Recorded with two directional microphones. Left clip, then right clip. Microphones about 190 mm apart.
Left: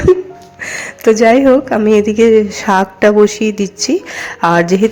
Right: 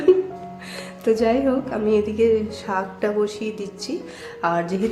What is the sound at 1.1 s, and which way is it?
A woman's voice, 40° left (ahead or behind).